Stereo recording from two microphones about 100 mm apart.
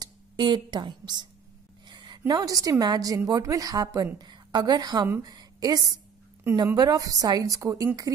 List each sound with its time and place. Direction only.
0.0 s speech: 45° right (ahead or behind)
1.9 s a sound: 45° right (ahead or behind)
2.8 s a woman's voice: 40° right (ahead or behind)
6.5 s speech: 25° right (ahead or behind)
6.8 s a woman's voice: 40° right (ahead or behind)